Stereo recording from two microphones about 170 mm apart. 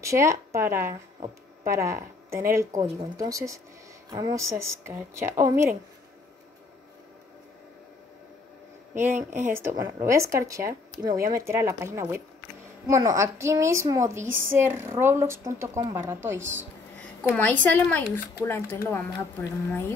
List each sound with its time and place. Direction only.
0.0 s a woman's voice: 15° right (ahead or behind)
9.1 s speech: 45° right (ahead or behind)
9.5 s a woman's voice: 15° right (ahead or behind)
17.4 s speech: 10° left (ahead or behind)